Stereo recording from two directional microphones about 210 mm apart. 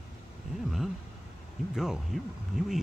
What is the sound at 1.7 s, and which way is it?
Speech, centre (ahead or behind).